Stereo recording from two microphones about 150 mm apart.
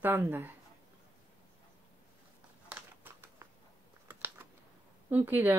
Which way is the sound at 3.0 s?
15° right (ahead or behind).